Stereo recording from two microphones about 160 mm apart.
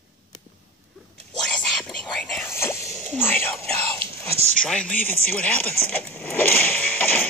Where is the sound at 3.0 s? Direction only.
10° left (ahead or behind).